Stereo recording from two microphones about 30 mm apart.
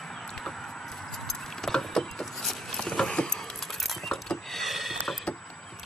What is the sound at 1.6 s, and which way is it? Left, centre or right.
Vehicle, centre.